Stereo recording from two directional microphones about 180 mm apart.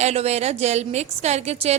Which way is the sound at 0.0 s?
35° right (ahead or behind).